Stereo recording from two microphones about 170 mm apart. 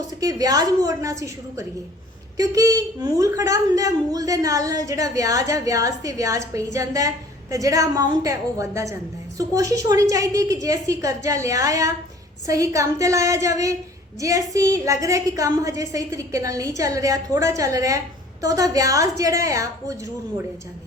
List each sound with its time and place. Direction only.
0.2 s a woman's voice: 20° right (ahead or behind)
2.4 s a woman's voice: 20° right (ahead or behind)